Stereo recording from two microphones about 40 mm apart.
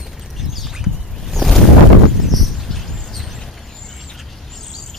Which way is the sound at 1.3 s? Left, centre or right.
Centre.